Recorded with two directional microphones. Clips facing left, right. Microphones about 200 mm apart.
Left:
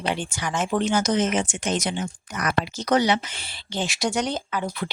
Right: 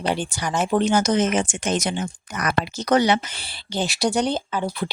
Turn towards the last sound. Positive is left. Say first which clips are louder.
# right 3 dB
turn(degrees=-30)  # may be behind; listen again after turning